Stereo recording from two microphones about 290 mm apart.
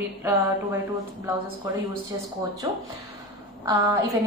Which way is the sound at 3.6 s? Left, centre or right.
Centre.